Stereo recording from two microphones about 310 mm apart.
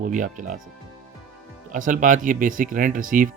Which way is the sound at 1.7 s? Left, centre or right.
Right.